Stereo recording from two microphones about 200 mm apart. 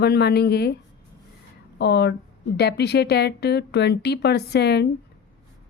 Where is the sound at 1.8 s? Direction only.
55° left (ahead or behind).